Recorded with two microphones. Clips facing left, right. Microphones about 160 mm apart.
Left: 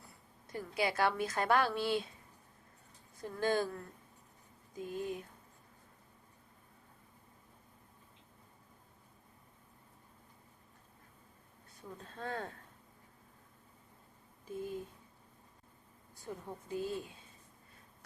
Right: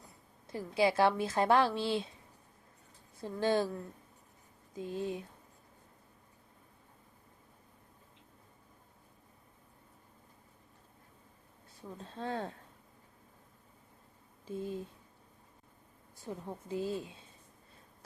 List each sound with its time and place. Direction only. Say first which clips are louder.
0.0 s speech: right 2 dB; 25° right (ahead or behind)
3.2 s speech: right 3 dB; 25° right (ahead or behind)
4.7 s speech: right 2 dB; 25° right (ahead or behind)
11.9 s speech: right 3 dB; 25° right (ahead or behind)
14.4 s speech: right 2 dB; 30° right (ahead or behind)
16.2 s speech: right 3 dB; 25° right (ahead or behind)